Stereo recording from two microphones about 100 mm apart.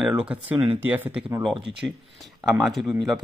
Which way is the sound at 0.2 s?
15° right (ahead or behind).